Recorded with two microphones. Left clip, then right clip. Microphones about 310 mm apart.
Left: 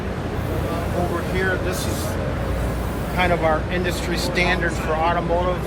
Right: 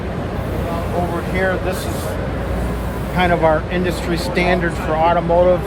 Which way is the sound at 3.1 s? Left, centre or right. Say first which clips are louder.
Right 5 dB; right.